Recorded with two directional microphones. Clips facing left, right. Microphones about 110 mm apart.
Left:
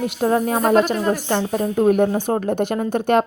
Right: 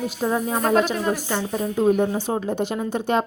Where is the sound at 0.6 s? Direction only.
5° left (ahead or behind).